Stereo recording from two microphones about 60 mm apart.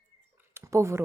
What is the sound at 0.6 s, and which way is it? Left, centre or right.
Speech, right.